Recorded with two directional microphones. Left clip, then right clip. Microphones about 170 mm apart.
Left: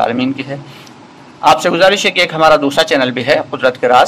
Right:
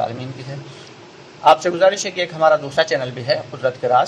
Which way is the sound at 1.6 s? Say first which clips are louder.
Left 6 dB; 35° left (ahead or behind).